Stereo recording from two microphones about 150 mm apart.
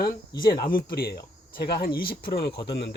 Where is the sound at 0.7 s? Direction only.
85° left.